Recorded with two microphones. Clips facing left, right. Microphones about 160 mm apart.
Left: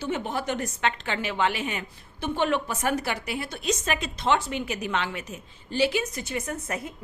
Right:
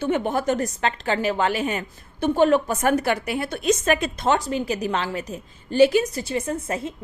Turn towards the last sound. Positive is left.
turn(degrees=-30)  # may be behind; listen again after turning